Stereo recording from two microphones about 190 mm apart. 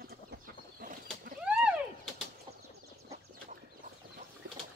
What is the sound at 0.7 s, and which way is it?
Chicken, 50° right (ahead or behind).